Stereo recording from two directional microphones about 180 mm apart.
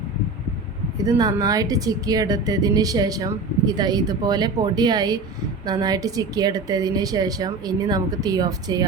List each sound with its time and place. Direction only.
0.9 s speech: 20° right (ahead or behind)